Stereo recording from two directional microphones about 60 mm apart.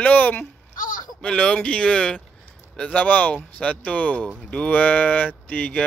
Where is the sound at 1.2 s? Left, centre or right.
Centre.